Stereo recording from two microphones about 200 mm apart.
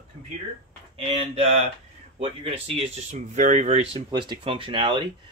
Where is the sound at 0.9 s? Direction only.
30° right (ahead or behind).